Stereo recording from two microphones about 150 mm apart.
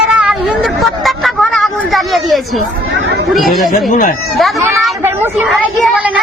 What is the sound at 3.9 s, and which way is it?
Speech, 60° left (ahead or behind).